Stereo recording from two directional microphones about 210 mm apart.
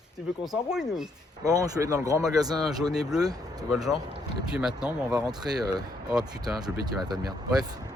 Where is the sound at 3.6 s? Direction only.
Centre (ahead or behind).